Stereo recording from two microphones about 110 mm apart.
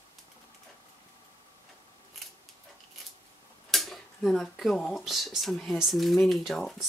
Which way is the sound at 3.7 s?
Centre (ahead or behind).